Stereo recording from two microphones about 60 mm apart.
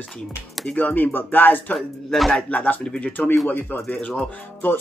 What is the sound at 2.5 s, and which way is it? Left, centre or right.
Speech, left.